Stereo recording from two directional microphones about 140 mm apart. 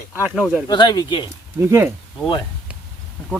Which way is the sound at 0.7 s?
30° left (ahead or behind).